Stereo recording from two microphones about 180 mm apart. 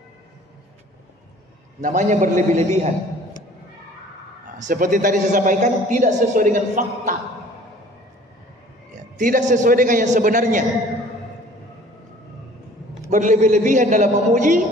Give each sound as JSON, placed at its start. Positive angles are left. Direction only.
{"t": 1.8, "sound": "a man's voice", "side_deg": -45}
{"t": 4.6, "sound": "a man's voice", "side_deg": -45}
{"t": 8.9, "sound": "a man's voice", "side_deg": -45}
{"t": 13.1, "sound": "a man's voice", "side_deg": -40}